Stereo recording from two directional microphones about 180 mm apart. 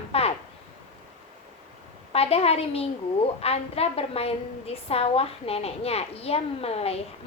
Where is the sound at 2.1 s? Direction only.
35° left (ahead or behind).